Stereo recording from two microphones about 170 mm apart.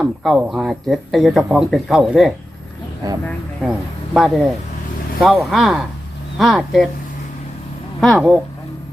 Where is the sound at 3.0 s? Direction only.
20° right (ahead or behind).